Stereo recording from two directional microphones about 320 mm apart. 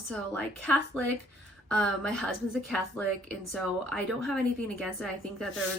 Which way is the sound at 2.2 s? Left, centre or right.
Centre.